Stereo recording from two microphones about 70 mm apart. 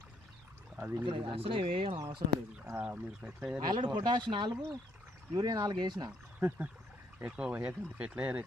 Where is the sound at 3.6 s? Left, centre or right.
Right.